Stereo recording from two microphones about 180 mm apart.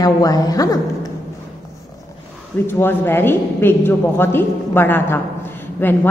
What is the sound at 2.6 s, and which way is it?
A woman's voice, 10° left (ahead or behind).